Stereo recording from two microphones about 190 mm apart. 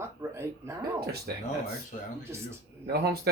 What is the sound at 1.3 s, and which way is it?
Speech, 55° right (ahead or behind).